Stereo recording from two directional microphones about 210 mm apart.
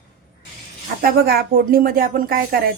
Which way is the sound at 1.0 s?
45° right (ahead or behind).